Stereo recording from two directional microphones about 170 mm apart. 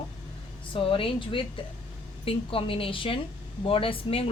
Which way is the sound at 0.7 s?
30° left (ahead or behind).